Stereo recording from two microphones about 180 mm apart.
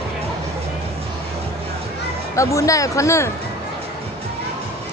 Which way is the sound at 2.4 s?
15° left (ahead or behind).